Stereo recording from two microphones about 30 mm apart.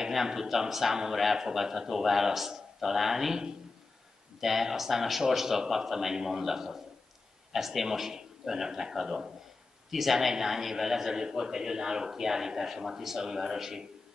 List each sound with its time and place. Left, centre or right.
0.1 s a man's voice: centre
4.4 s a man's voice: centre